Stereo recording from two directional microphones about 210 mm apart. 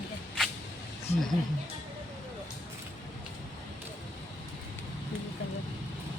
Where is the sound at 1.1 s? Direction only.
30° left (ahead or behind).